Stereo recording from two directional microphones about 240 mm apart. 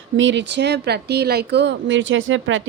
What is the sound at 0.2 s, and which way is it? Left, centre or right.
A woman's voice, right.